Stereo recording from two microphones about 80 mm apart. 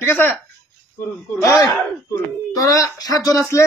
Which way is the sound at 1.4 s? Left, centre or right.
Left.